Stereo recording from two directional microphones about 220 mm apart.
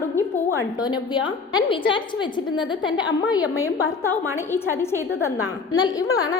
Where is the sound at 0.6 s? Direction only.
20° left (ahead or behind).